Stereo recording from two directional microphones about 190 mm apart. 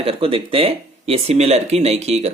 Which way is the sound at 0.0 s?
30° right (ahead or behind).